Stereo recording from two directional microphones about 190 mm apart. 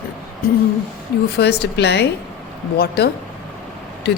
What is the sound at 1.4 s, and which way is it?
A woman's voice, 60° left (ahead or behind).